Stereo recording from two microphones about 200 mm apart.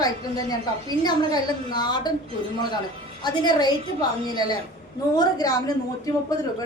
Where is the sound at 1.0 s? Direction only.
20° left (ahead or behind).